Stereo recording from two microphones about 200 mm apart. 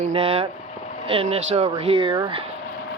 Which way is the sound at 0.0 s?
30° right (ahead or behind).